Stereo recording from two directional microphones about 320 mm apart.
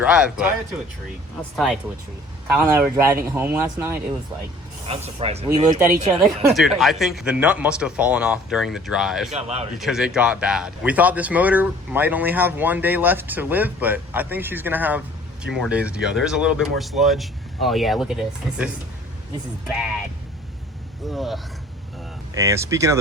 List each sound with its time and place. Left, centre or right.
0.0 s speech: centre
4.9 s speech: centre
6.2 s speech: centre
9.3 s speech: centre
9.7 s speech: centre
21.1 s speech: centre